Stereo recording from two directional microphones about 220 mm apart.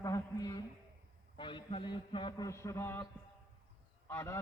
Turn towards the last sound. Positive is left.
turn(degrees=10)  # may be behind; listen again after turning